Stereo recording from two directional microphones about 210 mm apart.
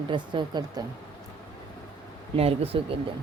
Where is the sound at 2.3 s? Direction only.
30° right (ahead or behind).